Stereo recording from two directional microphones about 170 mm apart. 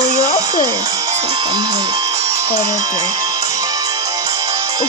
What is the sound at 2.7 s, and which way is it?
Music, 20° right (ahead or behind).